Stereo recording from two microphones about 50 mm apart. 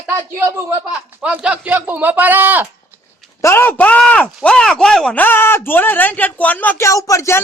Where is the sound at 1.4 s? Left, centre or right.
Right.